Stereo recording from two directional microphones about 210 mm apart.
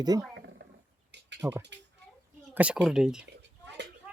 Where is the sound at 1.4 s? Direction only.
10° right (ahead or behind).